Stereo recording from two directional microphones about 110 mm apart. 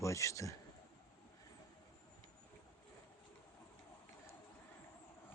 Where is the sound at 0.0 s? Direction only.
30° left (ahead or behind).